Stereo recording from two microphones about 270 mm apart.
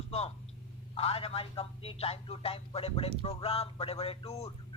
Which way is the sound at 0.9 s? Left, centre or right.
Left.